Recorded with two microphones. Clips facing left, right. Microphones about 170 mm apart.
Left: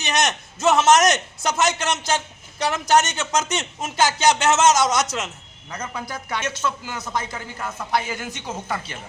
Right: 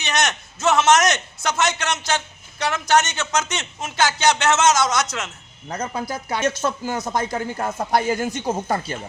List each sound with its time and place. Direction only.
0.8 s a man's voice: 35° left (ahead or behind)
5.0 s a man's voice: centre (ahead or behind)
5.6 s speech: 30° right (ahead or behind)
6.6 s speech: 45° right (ahead or behind)